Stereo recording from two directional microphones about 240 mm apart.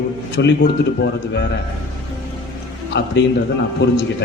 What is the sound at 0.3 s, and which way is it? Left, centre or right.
A man's voice, left.